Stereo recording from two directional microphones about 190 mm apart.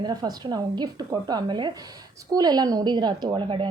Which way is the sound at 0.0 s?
20° right (ahead or behind).